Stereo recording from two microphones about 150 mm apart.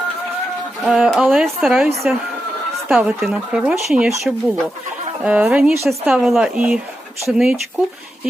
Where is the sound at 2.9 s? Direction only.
5° right (ahead or behind).